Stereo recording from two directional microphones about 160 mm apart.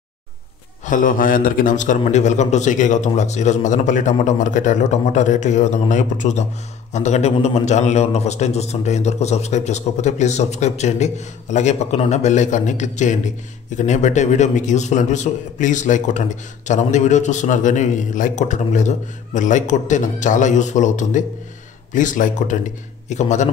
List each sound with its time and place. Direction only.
0.8 s a man's voice: 55° left (ahead or behind)